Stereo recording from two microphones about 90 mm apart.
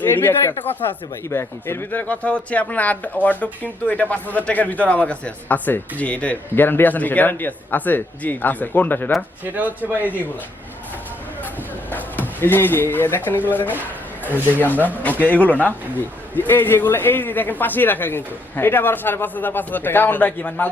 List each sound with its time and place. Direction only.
0.0 s speech: 25° left (ahead or behind)
9.4 s speech: 20° right (ahead or behind)
11.9 s speech: 20° left (ahead or behind)
15.0 s speech: 20° left (ahead or behind)